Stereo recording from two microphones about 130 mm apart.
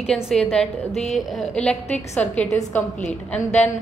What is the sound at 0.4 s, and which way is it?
A woman's voice, 10° left (ahead or behind).